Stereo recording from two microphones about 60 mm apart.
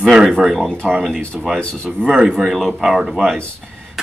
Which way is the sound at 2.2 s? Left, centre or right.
Centre.